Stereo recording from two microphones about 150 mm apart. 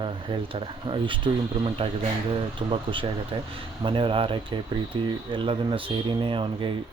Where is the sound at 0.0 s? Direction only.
35° right (ahead or behind).